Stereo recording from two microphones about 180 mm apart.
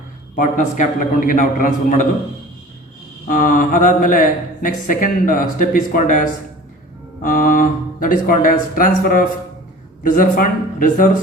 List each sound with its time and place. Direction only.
0.3 s speech: 45° left (ahead or behind)
3.2 s speech: 50° left (ahead or behind)